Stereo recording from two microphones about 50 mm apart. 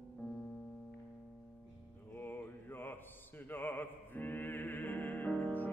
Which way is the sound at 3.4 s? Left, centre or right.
Left.